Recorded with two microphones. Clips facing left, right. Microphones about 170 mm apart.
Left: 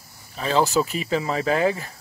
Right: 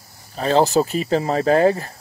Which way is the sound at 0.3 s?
40° right (ahead or behind).